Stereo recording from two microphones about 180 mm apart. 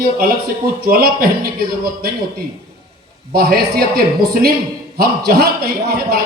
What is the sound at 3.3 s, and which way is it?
A man's voice, 55° right (ahead or behind).